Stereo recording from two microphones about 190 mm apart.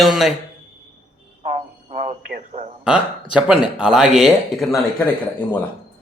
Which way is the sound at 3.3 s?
5° right (ahead or behind).